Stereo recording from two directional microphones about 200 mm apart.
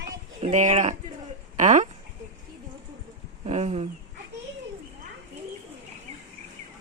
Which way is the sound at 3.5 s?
35° right (ahead or behind).